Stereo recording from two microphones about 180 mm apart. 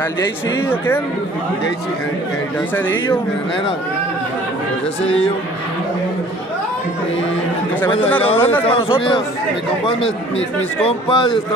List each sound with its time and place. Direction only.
0.7 s speech: 10° left (ahead or behind)
8.4 s speech: 10° left (ahead or behind)
8.6 s speech: 30° left (ahead or behind)
10.8 s speech: 30° left (ahead or behind)